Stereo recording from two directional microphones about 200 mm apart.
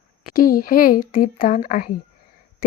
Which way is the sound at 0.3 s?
45° left (ahead or behind).